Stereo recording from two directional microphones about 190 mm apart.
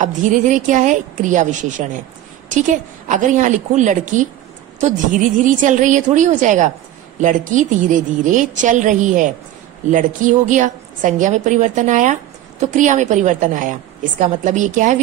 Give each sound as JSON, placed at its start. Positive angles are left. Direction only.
{"t": 0.0, "sound": "a woman's voice", "side_deg": -40}